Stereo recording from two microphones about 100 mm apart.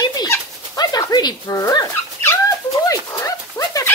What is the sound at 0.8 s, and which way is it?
Dog, 40° left (ahead or behind).